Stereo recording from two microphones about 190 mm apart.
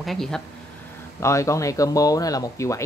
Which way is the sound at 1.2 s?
15° left (ahead or behind).